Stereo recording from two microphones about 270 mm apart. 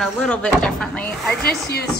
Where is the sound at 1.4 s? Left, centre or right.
Left.